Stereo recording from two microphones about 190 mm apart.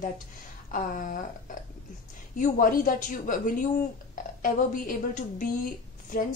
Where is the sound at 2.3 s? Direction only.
45° left (ahead or behind).